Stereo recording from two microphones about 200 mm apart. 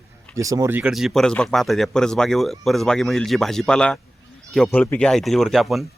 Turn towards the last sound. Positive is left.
turn(degrees=0)  # may be behind; listen again after turning